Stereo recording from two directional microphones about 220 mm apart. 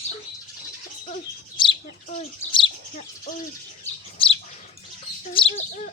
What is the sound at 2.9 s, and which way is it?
Bird, 35° left (ahead or behind).